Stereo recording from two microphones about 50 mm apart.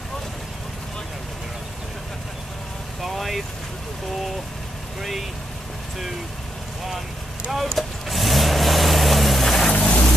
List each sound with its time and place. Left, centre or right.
3.0 s vehicle: centre
7.5 s vehicle: centre
9.7 s vehicle: left